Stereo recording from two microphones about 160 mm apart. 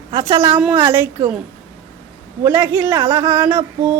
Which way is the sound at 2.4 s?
15° right (ahead or behind).